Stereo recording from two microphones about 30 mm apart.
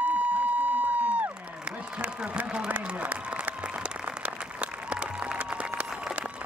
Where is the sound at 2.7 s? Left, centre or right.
Right.